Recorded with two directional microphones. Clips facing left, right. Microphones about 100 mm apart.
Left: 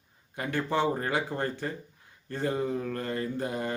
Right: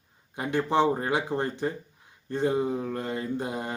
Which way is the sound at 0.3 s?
20° right (ahead or behind).